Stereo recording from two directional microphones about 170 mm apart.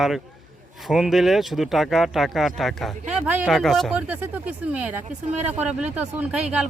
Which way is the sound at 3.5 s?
Centre (ahead or behind).